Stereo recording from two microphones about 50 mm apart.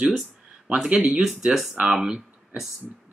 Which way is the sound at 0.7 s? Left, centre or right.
Right.